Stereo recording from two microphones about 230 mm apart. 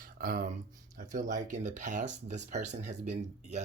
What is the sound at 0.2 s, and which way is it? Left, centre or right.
Speech, right.